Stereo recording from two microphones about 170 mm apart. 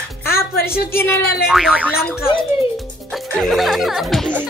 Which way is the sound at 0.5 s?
65° left (ahead or behind).